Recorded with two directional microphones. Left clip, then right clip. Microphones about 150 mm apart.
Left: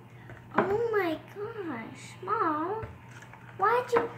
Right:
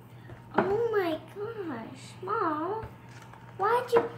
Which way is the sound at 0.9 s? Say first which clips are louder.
Even; 15° right (ahead or behind).